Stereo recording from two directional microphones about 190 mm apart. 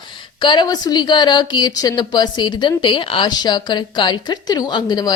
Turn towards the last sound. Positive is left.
turn(degrees=20)  # may be behind; listen again after turning